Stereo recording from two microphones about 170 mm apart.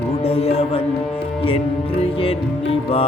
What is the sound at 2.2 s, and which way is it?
Music, 35° left (ahead or behind).